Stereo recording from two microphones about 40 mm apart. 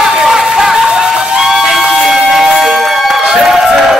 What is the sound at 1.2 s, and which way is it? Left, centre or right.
Music, right.